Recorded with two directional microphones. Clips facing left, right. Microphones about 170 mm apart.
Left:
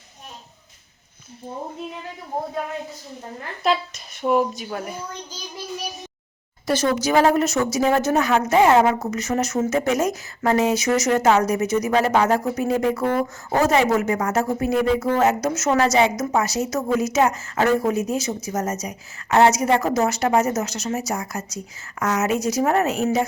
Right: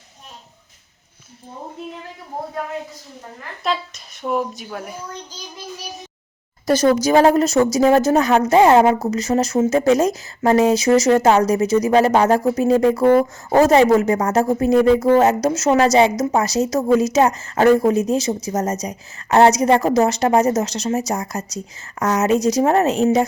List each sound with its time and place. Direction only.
3.6 s a woman's voice: 5° left (ahead or behind)
6.7 s a woman's voice: 40° right (ahead or behind)